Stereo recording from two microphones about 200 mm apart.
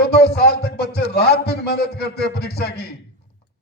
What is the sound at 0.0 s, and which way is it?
A man's voice, 55° left (ahead or behind).